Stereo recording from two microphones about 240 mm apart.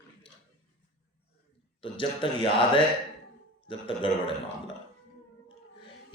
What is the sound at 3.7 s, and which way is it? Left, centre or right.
Speech, left.